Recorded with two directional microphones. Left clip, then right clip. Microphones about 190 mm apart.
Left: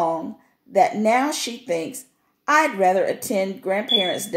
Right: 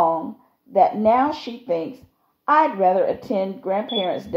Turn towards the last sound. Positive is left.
turn(degrees=20)  # may be behind; listen again after turning